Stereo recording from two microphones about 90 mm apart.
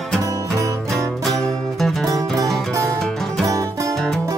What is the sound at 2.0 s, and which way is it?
Music, 40° right (ahead or behind).